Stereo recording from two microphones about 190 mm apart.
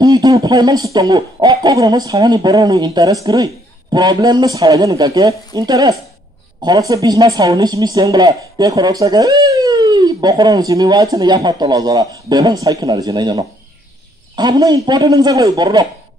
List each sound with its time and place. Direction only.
0.0 s speech: 20° right (ahead or behind)